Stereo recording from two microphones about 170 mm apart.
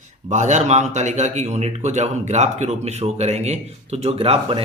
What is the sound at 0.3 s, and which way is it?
A man's voice, 45° right (ahead or behind).